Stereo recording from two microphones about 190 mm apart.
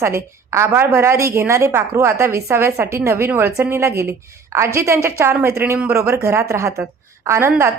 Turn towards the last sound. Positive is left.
turn(degrees=-15)  # may be behind; listen again after turning